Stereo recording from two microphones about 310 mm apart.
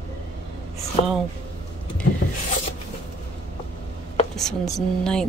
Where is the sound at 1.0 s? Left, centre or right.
Centre.